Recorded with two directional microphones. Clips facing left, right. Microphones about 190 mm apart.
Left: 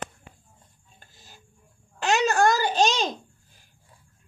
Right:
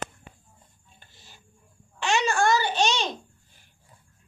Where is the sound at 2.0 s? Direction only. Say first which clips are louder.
Left 3 dB; 40° left (ahead or behind).